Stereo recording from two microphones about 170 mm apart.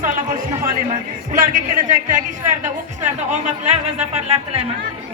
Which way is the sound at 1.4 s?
55° right (ahead or behind).